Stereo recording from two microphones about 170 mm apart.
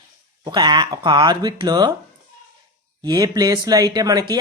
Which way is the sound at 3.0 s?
20° right (ahead or behind).